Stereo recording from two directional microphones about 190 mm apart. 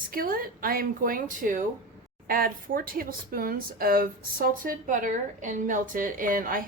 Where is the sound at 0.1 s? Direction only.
50° right (ahead or behind).